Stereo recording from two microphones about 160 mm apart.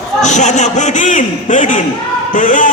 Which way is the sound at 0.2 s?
50° left (ahead or behind).